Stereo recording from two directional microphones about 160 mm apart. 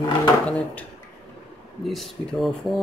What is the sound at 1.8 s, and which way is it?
Speech, centre (ahead or behind).